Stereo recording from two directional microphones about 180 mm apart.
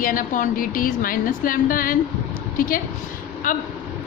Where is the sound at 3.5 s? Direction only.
50° left (ahead or behind).